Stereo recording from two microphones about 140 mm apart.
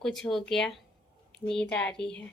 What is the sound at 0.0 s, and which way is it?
A woman's voice, centre (ahead or behind).